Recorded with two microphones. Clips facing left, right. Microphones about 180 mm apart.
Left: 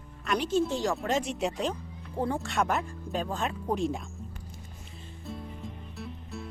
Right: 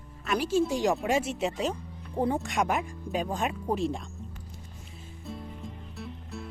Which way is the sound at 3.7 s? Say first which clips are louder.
Left 1 dB; centre (ahead or behind).